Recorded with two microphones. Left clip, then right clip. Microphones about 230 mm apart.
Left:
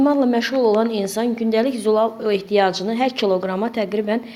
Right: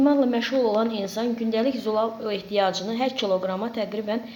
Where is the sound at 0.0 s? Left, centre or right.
Left.